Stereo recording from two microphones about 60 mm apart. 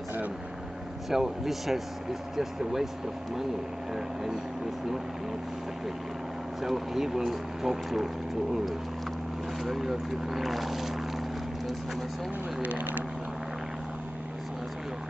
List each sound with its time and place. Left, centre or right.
1.1 s speech: centre
3.9 s speech: centre
6.6 s speech: centre
9.6 s speech: centre
12.6 s speech: right